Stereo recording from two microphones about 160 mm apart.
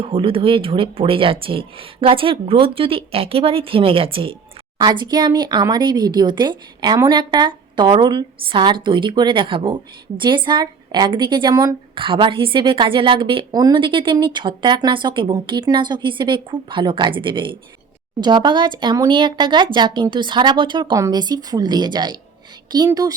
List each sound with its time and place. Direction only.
0.0 s speech: 35° right (ahead or behind)